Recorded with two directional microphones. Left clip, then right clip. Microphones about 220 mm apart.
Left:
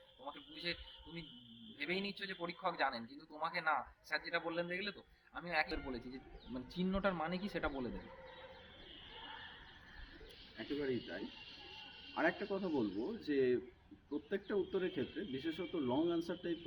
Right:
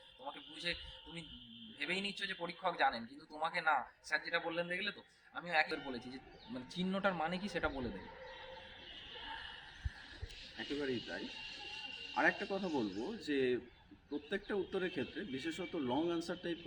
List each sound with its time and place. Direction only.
0.3 s a man's voice: 5° left (ahead or behind)
10.8 s speech: 15° right (ahead or behind)